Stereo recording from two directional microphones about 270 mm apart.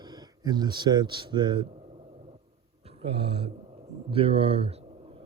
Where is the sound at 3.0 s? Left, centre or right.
Right.